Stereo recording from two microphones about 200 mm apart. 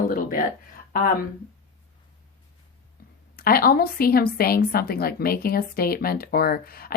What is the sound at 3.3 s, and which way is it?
A woman's voice, 45° left (ahead or behind).